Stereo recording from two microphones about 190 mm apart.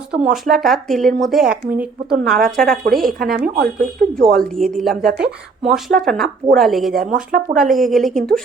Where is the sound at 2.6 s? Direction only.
50° right (ahead or behind).